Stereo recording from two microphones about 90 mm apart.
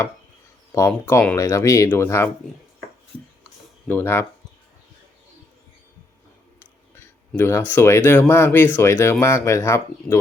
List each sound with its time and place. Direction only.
0.7 s speech: 35° left (ahead or behind)
3.8 s speech: 20° left (ahead or behind)
6.9 s speech: 25° left (ahead or behind)